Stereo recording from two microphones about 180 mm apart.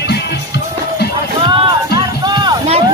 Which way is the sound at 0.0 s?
65° left (ahead or behind).